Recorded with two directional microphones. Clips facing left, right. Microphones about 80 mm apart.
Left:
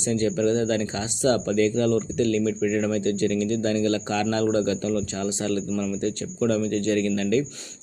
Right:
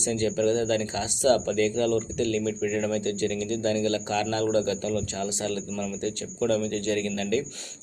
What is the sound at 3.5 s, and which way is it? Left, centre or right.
Speech, left.